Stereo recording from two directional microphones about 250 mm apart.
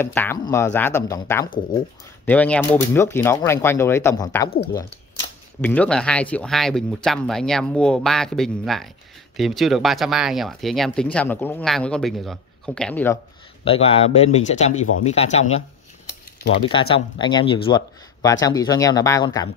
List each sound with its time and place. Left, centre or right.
0.0 s speech: centre
5.6 s speech: centre
13.7 s speech: left
16.6 s speech: left